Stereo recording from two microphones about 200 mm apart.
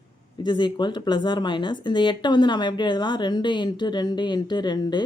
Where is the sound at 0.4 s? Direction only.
25° left (ahead or behind).